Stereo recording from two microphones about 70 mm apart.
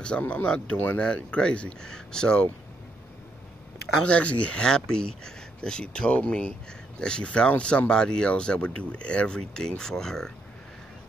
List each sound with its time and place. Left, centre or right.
0.2 s speech: centre
4.1 s speech: centre